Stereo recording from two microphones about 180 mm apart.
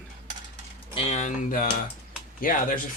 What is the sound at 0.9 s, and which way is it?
Speech, 40° left (ahead or behind).